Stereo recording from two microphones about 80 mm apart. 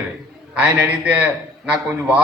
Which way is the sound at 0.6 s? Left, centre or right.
Centre.